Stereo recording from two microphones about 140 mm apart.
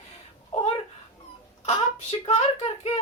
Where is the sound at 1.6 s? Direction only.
50° left (ahead or behind).